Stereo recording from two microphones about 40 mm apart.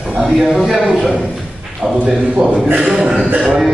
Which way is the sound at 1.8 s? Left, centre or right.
Right.